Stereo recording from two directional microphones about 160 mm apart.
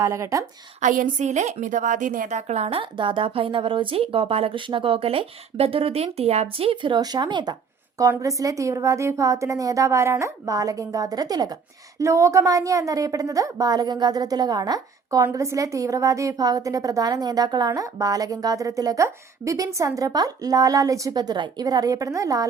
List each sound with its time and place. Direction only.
0.0 s a woman's voice: 20° right (ahead or behind)
0.8 s a woman's voice: 55° right (ahead or behind); by 22.4 s 20° right (ahead or behind)